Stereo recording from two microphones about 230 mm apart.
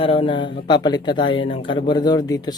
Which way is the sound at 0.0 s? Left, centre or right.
Left.